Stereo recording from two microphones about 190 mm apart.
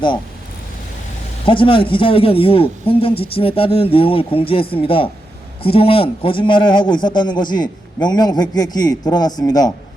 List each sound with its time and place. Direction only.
1.5 s speech: 25° left (ahead or behind)